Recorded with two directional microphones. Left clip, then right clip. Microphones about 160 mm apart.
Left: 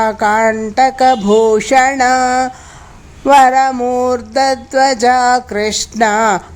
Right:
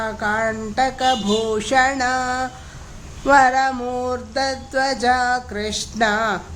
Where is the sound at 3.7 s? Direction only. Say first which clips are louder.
Left 10 dB; 20° left (ahead or behind).